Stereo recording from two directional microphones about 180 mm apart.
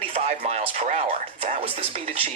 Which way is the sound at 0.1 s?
35° right (ahead or behind).